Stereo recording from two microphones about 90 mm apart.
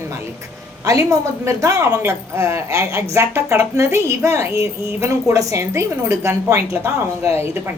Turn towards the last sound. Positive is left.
turn(degrees=-30)  # may be behind; listen again after turning